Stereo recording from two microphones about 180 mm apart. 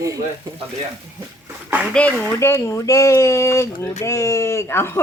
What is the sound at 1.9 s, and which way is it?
Speech, 5° left (ahead or behind).